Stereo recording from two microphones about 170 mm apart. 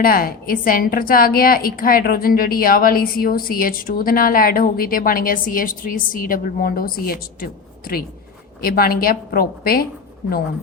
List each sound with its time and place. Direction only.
0.0 s a woman's voice: 60° left (ahead or behind)